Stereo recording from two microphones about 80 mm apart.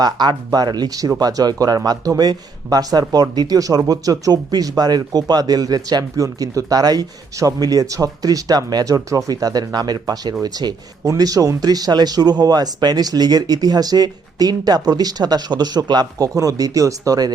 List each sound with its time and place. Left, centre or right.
0.0 s a man's voice: right